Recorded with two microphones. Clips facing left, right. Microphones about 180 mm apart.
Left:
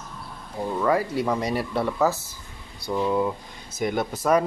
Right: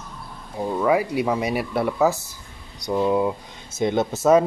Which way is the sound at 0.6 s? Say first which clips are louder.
Right 3 dB; 15° right (ahead or behind).